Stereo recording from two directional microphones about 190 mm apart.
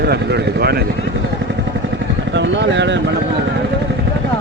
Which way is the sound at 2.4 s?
70° right (ahead or behind).